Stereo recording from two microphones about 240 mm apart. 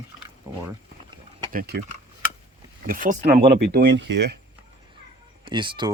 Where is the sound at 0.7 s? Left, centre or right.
Centre.